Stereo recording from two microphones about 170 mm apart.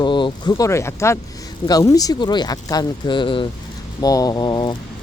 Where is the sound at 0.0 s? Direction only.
30° left (ahead or behind).